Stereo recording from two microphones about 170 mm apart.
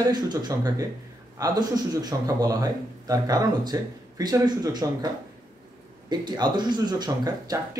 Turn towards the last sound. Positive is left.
turn(degrees=-25)  # may be behind; listen again after turning